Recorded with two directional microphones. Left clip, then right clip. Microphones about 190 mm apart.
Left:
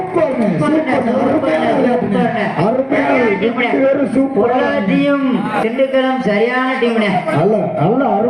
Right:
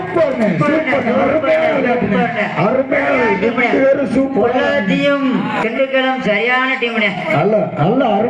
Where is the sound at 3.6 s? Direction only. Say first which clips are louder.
Right 1 dB; 25° right (ahead or behind).